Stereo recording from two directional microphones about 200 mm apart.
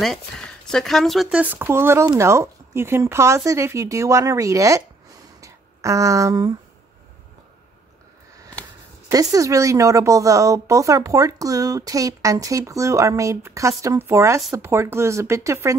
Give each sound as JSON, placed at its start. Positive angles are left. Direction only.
{"t": 0.0, "sound": "speech", "side_deg": 0}
{"t": 5.4, "sound": "a sound", "side_deg": -15}
{"t": 9.1, "sound": "speech", "side_deg": -15}